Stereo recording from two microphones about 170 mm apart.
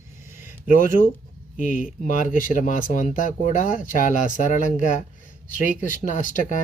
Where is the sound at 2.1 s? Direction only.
50° left (ahead or behind).